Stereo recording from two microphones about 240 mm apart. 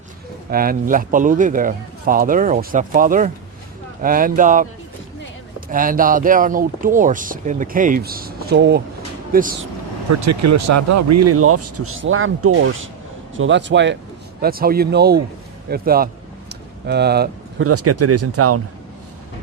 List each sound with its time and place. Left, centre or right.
0.5 s speech: right
10.1 s speech: right
16.5 s a sound: right
17.6 s speech: right